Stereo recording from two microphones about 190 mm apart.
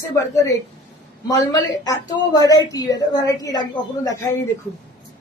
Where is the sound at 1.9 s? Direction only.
20° left (ahead or behind).